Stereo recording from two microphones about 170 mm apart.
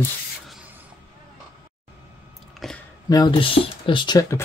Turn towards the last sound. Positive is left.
turn(degrees=20)  # may be behind; listen again after turning